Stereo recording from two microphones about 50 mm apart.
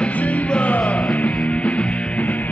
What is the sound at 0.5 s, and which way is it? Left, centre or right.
Music, left.